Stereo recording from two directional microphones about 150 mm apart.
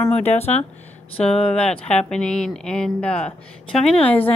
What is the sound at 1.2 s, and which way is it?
Speech, 5° left (ahead or behind).